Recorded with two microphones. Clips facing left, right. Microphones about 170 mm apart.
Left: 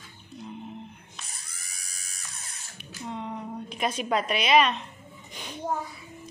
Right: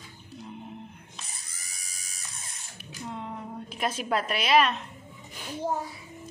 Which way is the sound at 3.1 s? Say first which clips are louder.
Left 3 dB; 5° right (ahead or behind).